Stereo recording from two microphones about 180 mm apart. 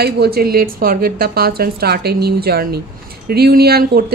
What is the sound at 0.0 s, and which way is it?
A woman's voice, 60° right (ahead or behind).